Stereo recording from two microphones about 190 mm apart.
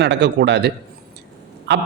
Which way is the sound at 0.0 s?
65° right (ahead or behind).